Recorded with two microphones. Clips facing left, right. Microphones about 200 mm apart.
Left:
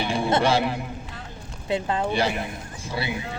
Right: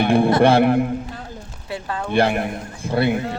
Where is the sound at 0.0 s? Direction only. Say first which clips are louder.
Right 8 dB; 55° right (ahead or behind).